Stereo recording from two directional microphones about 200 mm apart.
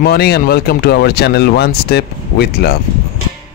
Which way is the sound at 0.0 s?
50° left (ahead or behind).